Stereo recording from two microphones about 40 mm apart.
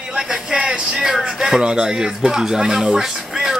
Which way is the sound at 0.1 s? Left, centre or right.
Centre.